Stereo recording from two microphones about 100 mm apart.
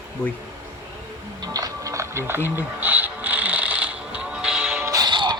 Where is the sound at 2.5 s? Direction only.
20° right (ahead or behind).